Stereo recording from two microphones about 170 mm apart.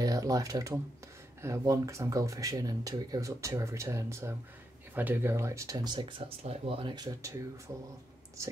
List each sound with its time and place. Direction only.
0.0 s speech: 20° right (ahead or behind)